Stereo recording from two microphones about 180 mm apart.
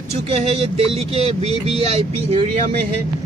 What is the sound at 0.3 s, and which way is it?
Speech, 35° right (ahead or behind).